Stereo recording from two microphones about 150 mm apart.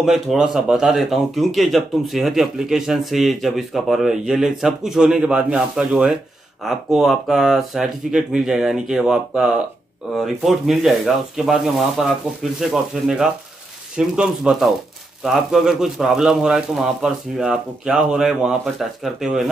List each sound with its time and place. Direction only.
0.0 s a man's voice: centre (ahead or behind)
13.9 s a man's voice: 5° right (ahead or behind)